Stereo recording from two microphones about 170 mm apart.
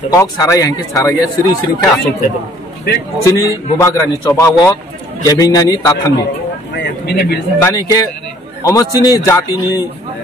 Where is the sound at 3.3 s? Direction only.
20° left (ahead or behind).